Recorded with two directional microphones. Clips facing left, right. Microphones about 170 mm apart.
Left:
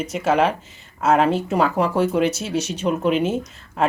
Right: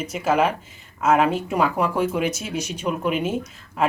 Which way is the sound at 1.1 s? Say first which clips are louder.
Left 1 dB; 30° left (ahead or behind).